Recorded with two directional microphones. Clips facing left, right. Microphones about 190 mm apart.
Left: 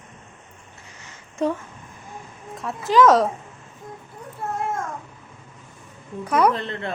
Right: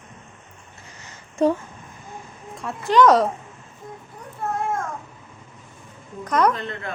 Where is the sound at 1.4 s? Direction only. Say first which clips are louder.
Right 4 dB; 35° right (ahead or behind).